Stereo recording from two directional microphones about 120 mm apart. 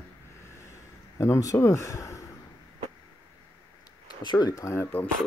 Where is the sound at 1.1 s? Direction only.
25° left (ahead or behind).